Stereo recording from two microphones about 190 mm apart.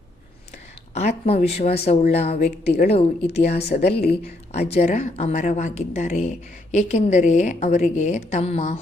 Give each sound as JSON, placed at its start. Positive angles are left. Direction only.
{"t": 0.9, "sound": "speech", "side_deg": 35}